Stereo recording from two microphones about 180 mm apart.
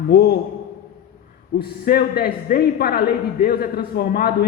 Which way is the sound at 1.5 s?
60° left (ahead or behind).